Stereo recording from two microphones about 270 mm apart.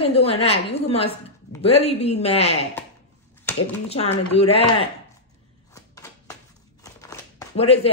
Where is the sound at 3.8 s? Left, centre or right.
Left.